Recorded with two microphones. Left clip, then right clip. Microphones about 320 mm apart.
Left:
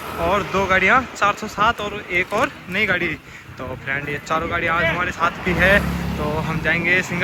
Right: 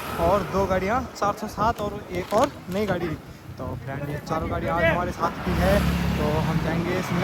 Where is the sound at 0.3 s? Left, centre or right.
Centre.